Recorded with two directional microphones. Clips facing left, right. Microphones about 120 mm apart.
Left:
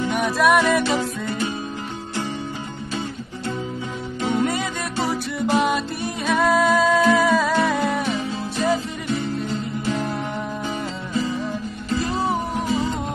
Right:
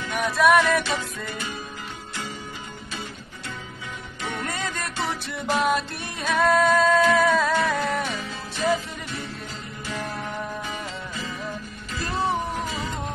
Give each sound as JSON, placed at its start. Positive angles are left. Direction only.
{"t": 0.1, "sound": "music", "side_deg": 0}
{"t": 4.2, "sound": "music", "side_deg": 30}
{"t": 4.5, "sound": "music", "side_deg": 5}
{"t": 4.9, "sound": "music", "side_deg": 40}
{"t": 5.7, "sound": "music", "side_deg": 0}